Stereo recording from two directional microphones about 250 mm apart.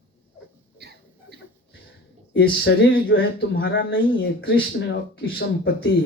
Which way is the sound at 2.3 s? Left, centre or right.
Left.